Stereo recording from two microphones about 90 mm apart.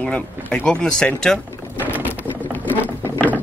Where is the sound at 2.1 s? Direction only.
20° left (ahead or behind).